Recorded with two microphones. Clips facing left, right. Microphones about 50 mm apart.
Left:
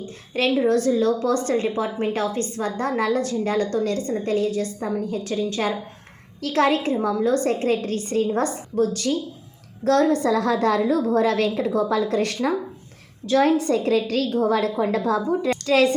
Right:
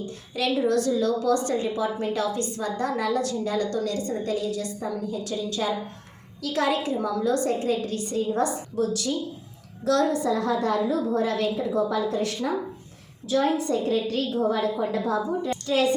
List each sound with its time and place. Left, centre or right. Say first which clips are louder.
0.0 s a woman's voice: left 4 dB; left
10.2 s a woman's voice: left 4 dB; left
14.3 s a woman's voice: left 4 dB; left
15.4 s a woman's voice: left 5 dB; left